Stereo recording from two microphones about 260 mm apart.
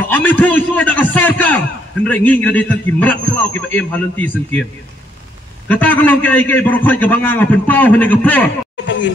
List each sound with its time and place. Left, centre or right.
0.0 s a man's voice: centre
5.7 s a man's voice: centre
8.8 s a sound: left